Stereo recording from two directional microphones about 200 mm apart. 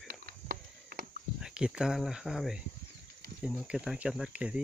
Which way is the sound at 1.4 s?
5° right (ahead or behind).